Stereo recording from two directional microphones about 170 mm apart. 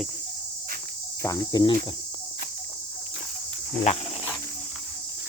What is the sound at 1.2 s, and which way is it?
Cricket, 20° left (ahead or behind).